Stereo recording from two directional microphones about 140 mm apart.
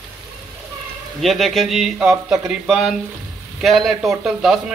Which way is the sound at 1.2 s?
Centre (ahead or behind).